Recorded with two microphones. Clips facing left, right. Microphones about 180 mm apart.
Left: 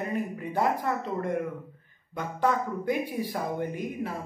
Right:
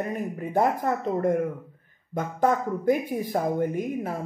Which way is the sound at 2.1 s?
45° right (ahead or behind).